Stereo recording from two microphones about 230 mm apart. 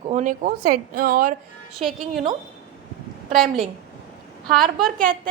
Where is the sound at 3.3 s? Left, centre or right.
Centre.